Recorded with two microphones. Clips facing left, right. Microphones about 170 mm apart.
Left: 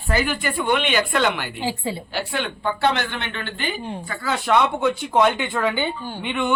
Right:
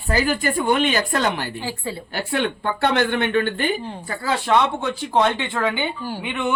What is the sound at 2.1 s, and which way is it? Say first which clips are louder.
Speech: right 3 dB; 55° right (ahead or behind).